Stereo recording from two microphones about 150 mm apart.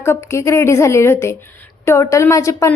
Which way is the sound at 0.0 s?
15° left (ahead or behind).